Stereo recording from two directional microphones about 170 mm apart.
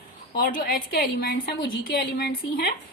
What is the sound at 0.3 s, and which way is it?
A woman's voice, 60° left (ahead or behind).